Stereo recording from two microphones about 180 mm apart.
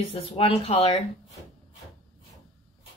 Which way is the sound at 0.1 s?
35° left (ahead or behind).